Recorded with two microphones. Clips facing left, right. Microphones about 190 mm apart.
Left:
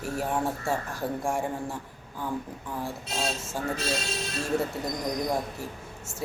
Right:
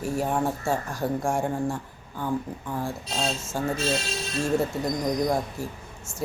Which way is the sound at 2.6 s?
25° right (ahead or behind).